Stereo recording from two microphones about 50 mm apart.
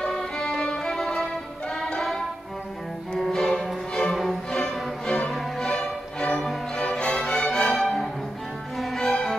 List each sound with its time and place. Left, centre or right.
0.1 s violin: centre
1.8 s music: centre
3.2 s cello: centre
3.9 s music: centre